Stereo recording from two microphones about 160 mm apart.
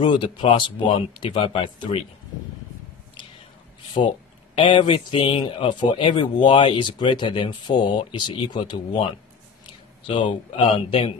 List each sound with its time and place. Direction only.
0.0 s speech: 30° left (ahead or behind)
4.6 s speech: 30° left (ahead or behind)
10.0 s speech: 35° left (ahead or behind)